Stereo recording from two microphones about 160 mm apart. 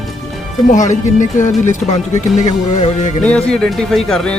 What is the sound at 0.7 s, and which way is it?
Speech, 50° left (ahead or behind).